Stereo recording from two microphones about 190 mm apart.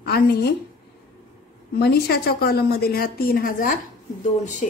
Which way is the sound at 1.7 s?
55° left (ahead or behind).